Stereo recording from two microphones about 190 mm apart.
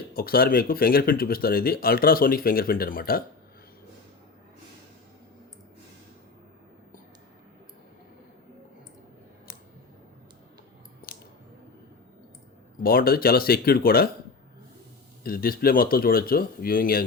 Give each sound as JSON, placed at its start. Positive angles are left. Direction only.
{"t": 0.1, "sound": "speech", "side_deg": 50}
{"t": 12.8, "sound": "speech", "side_deg": 50}
{"t": 15.2, "sound": "speech", "side_deg": 50}